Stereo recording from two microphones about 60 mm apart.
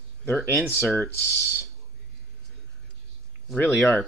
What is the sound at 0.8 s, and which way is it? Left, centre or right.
Speech, left.